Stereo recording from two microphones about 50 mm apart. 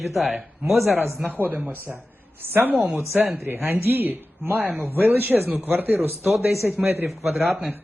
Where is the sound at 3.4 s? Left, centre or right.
Right.